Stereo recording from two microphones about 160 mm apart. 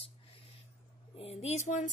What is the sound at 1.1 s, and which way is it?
Speech, 40° left (ahead or behind).